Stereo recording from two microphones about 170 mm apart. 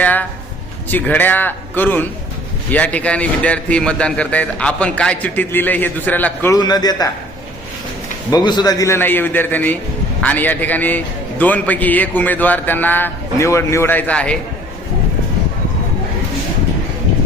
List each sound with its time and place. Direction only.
0.0 s a sound: 10° left (ahead or behind)
0.9 s a man's voice: 10° left (ahead or behind)
6.6 s a man's voice: 25° left (ahead or behind)
8.3 s a man's voice: 25° left (ahead or behind); by 14.3 s 5° left (ahead or behind)